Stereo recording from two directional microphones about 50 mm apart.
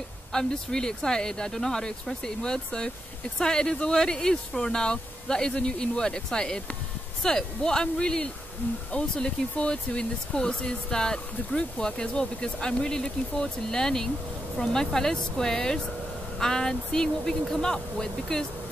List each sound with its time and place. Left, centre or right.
0.3 s speech: centre